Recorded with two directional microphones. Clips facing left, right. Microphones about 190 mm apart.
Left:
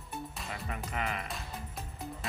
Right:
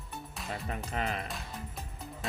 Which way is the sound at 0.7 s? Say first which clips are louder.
Right 1 dB; 35° right (ahead or behind).